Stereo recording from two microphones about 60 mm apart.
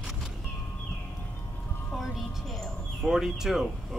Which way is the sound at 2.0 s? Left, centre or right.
Centre.